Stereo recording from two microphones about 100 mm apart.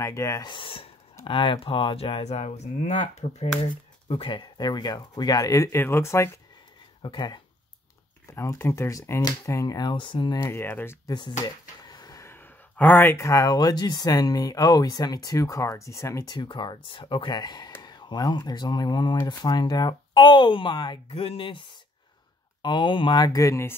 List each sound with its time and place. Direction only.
0.0 s speech: 30° left (ahead or behind)
0.4 s speech: 55° left (ahead or behind); by 3.4 s 90° left
4.1 s speech: 55° left (ahead or behind); by 6.4 s 25° left (ahead or behind)
7.0 s speech: 50° left (ahead or behind)
8.3 s speech: 30° left (ahead or behind); by 10.4 s 50° left (ahead or behind)
10.4 s speech: 20° left (ahead or behind)
11.1 s speech: 50° left (ahead or behind)
11.3 s a sound: 40° left (ahead or behind)
12.3 s speech: 20° left (ahead or behind)
16.3 s speech: 50° left (ahead or behind)
21.1 s speech: 70° left (ahead or behind); by 23.8 s 25° left (ahead or behind)